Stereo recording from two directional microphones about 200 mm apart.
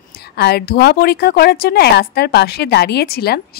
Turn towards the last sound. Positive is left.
turn(degrees=50)  # may be behind; listen again after turning